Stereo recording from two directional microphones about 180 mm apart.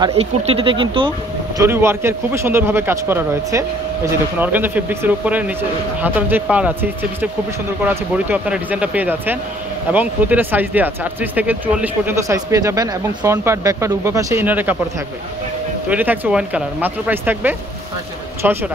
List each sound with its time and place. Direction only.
0.1 s speech: 35° right (ahead or behind)
1.6 s a man's voice: 15° right (ahead or behind)
15.9 s a man's voice: 10° right (ahead or behind)